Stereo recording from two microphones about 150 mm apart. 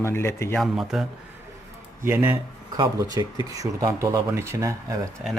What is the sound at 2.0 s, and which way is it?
Speech, 15° right (ahead or behind).